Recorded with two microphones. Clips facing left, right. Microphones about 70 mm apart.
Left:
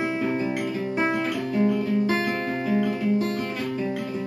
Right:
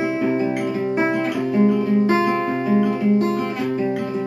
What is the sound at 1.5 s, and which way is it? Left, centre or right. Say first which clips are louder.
Guitar: right 6 dB; centre.